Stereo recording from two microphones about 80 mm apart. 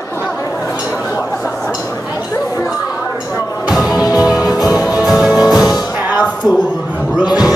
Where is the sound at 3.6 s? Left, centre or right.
Centre.